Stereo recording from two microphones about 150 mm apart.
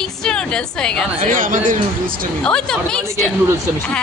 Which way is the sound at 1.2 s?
60° right (ahead or behind).